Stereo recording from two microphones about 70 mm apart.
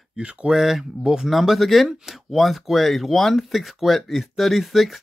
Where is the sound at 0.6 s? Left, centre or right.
Centre.